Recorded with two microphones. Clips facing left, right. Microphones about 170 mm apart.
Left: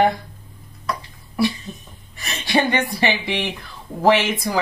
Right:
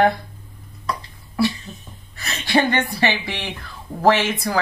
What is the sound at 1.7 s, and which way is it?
A woman's voice, 15° left (ahead or behind).